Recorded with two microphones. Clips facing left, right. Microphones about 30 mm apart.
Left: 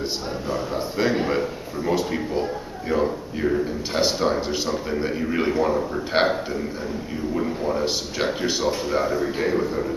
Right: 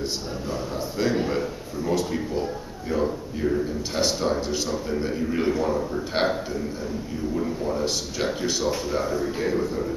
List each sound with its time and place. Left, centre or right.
0.7 s a man's voice: left